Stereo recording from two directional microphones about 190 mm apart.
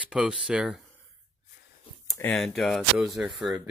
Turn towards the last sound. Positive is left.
turn(degrees=0)  # may be behind; listen again after turning